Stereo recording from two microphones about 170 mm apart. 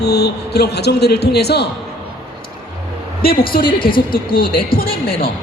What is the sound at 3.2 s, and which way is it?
Speech, 60° left (ahead or behind).